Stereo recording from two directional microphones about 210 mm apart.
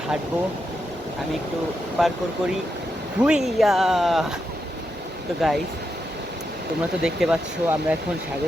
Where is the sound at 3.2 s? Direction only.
5° right (ahead or behind).